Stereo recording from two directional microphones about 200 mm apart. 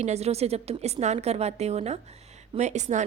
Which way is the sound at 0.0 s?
35° right (ahead or behind).